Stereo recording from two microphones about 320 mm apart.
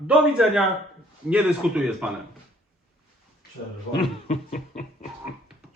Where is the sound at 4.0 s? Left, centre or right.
Left.